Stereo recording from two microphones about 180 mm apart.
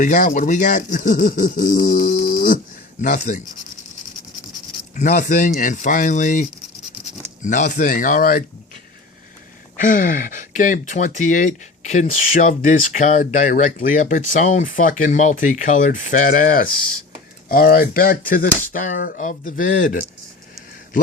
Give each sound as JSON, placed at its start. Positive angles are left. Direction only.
{"t": 0.0, "sound": "speech", "side_deg": 45}
{"t": 3.0, "sound": "speech", "side_deg": 40}
{"t": 4.9, "sound": "speech", "side_deg": 45}
{"t": 7.4, "sound": "speech", "side_deg": 45}
{"t": 9.7, "sound": "speech", "side_deg": 50}